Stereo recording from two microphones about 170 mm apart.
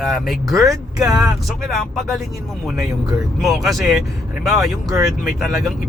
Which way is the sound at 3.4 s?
Centre (ahead or behind).